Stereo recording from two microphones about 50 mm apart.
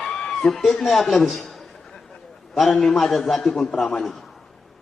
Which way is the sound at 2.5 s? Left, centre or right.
Centre.